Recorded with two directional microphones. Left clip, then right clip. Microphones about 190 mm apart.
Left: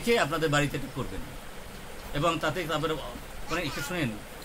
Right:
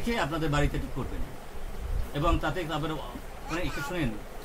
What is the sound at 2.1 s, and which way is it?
Speech, 20° left (ahead or behind).